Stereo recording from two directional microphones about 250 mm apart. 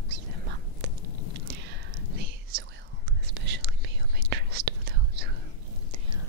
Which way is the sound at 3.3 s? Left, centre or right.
Right.